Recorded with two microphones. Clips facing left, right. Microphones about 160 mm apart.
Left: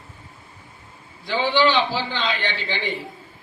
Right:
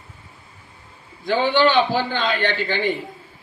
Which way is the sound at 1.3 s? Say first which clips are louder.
Right 2 dB; 50° right (ahead or behind).